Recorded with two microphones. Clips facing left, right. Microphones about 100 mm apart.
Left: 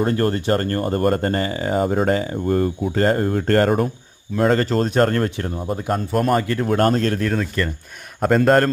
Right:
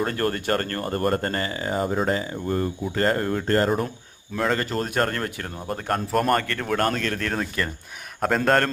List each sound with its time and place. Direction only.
0.0 s speech: 30° left (ahead or behind); by 3.0 s 45° left (ahead or behind)
3.0 s speech: 30° left (ahead or behind)
3.3 s speech: 55° left (ahead or behind)
4.4 s speech: 35° left (ahead or behind)
5.6 s speech: 5° left (ahead or behind)
6.7 s speech: 30° left (ahead or behind)
7.3 s speech: 5° right (ahead or behind)